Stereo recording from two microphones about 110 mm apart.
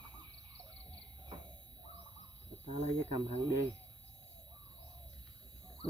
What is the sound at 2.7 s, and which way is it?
Speech, 80° right.